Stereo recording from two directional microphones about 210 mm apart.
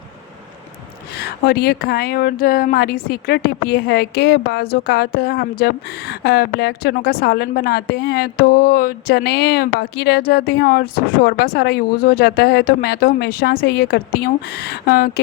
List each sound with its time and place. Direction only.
1.1 s speech: 50° left (ahead or behind)